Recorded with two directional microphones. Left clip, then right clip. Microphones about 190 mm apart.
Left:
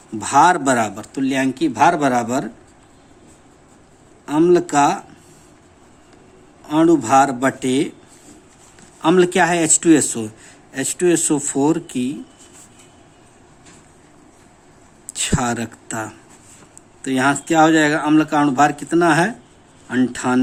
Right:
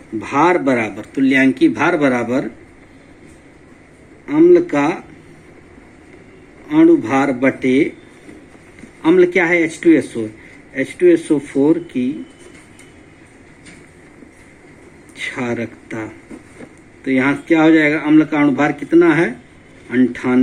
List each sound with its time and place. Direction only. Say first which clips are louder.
0.2 s speech: left 1 dB; 60° left (ahead or behind)
4.3 s speech: right 4 dB; 65° left (ahead or behind)
6.7 s speech: right 2 dB; 55° left (ahead or behind)
9.0 s speech: right 2 dB; 60° left (ahead or behind)
15.1 s speech: left 1 dB; 70° left (ahead or behind)